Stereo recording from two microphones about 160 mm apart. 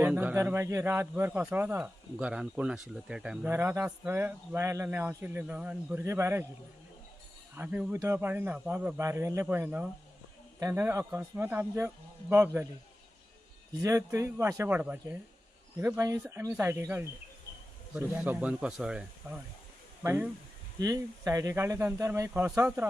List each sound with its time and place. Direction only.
0.0 s a man's voice: 10° right (ahead or behind)
3.5 s a man's voice: 15° right (ahead or behind)
7.5 s a man's voice: 10° right (ahead or behind)
13.8 s a man's voice: 20° right (ahead or behind)
18.1 s a man's voice: 10° right (ahead or behind)
20.7 s speech: 20° right (ahead or behind)
22.3 s a man's voice: 5° right (ahead or behind)